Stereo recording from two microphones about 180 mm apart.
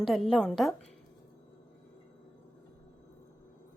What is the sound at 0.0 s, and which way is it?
Speech, centre (ahead or behind).